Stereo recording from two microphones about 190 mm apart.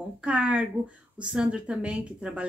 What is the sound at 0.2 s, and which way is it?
Speech, 5° right (ahead or behind).